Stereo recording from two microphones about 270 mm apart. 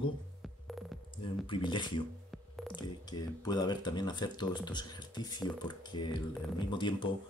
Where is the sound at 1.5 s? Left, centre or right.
Centre.